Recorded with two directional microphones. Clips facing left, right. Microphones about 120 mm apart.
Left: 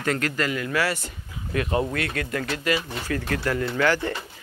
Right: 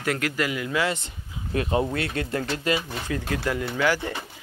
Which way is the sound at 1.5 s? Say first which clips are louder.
Even; 30° right (ahead or behind).